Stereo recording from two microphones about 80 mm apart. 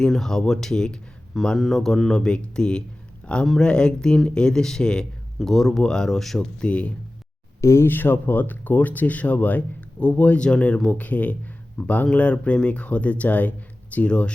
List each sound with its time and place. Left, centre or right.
0.0 s speech: centre
3.2 s a sound: centre
3.6 s speech: centre
7.6 s speech: left; by 11.3 s centre
11.8 s speech: centre